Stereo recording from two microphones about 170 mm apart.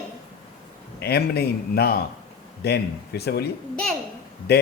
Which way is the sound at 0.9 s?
70° left (ahead or behind).